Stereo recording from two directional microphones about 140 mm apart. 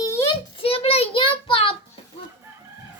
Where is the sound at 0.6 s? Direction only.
45° left (ahead or behind).